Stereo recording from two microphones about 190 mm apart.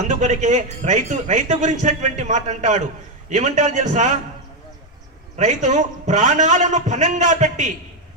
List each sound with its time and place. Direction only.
0.1 s speech: 40° right (ahead or behind)
5.4 s speech: 40° right (ahead or behind)